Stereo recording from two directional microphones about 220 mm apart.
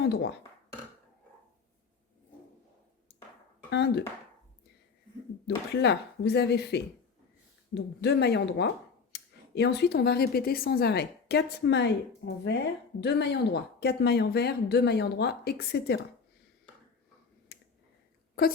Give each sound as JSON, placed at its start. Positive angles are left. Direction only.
{"t": 0.0, "sound": "speech", "side_deg": 50}
{"t": 3.7, "sound": "speech", "side_deg": 50}
{"t": 5.5, "sound": "speech", "side_deg": 50}
{"t": 17.5, "sound": "clicking", "side_deg": 45}
{"t": 18.4, "sound": "speech", "side_deg": 40}